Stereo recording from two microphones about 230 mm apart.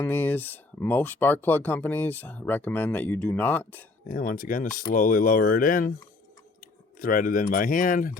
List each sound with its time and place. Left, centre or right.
0.0 s speech: centre
4.1 s speech: left